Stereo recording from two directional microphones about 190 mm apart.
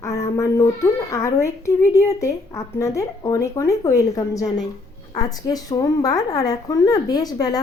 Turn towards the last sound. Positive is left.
turn(degrees=20)  # may be behind; listen again after turning